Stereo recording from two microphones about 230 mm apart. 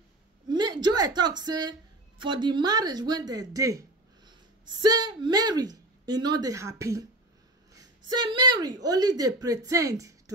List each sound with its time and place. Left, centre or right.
0.5 s a sound: centre
1.4 s speech: centre
8.1 s a woman's voice: centre